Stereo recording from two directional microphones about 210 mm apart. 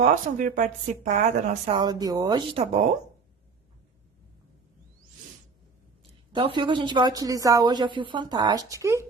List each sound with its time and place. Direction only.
0.0 s a woman's voice: 35° right (ahead or behind)
6.3 s a woman's voice: 20° right (ahead or behind)